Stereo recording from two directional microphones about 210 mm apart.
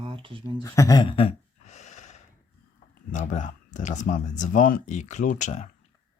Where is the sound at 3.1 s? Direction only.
35° left (ahead or behind).